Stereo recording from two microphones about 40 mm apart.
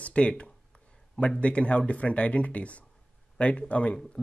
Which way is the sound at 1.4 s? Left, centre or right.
Left.